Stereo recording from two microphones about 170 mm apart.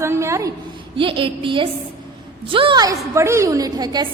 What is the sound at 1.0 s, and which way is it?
A woman's voice, 30° right (ahead or behind).